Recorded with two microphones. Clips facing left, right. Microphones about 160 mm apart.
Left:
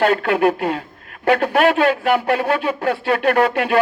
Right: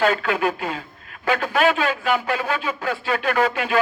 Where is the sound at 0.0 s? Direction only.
65° left (ahead or behind).